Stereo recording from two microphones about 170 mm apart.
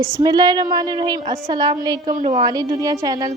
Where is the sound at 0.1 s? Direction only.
25° right (ahead or behind).